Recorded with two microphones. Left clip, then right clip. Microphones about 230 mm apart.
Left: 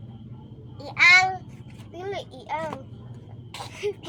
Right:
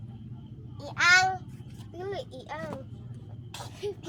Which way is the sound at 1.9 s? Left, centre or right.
Centre.